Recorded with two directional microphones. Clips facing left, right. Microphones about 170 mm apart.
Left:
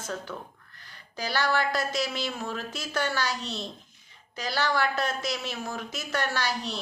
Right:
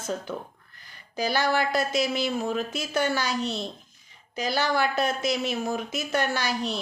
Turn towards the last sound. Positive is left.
turn(degrees=-15)  # may be behind; listen again after turning